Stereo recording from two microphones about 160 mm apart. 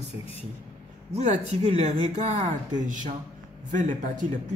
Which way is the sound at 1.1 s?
45° right (ahead or behind).